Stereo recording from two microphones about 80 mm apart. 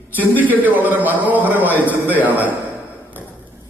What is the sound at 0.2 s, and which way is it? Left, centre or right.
A man's voice, right.